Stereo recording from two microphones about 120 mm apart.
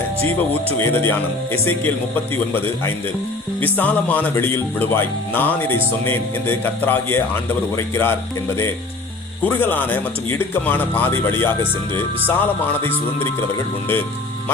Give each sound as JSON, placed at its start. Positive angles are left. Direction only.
{"t": 0.8, "sound": "speech", "side_deg": 20}
{"t": 9.4, "sound": "speech", "side_deg": 15}